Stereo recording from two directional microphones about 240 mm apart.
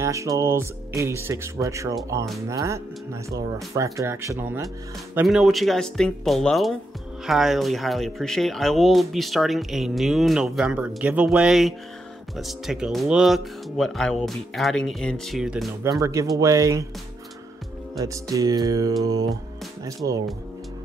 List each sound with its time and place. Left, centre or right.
0.0 s speech: centre
17.9 s speech: centre
20.0 s speech: right